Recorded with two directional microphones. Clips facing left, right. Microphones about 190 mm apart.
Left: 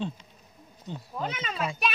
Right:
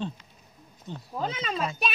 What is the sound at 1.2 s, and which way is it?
Speech, 30° right (ahead or behind).